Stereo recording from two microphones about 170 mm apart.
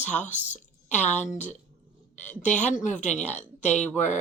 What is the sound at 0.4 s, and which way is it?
Speech, 45° left (ahead or behind).